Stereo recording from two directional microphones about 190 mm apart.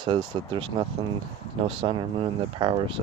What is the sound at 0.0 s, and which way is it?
Speech, 25° right (ahead or behind).